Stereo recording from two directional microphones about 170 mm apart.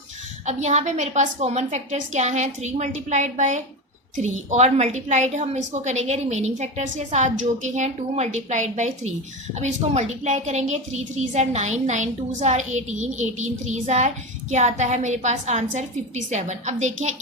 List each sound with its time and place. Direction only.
0.4 s a woman's voice: 40° right (ahead or behind)